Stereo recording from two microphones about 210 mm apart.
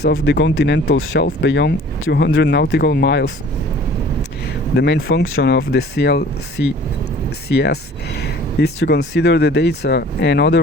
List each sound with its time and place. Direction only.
0.0 s speech: 55° left (ahead or behind)
4.8 s speech: 55° left (ahead or behind)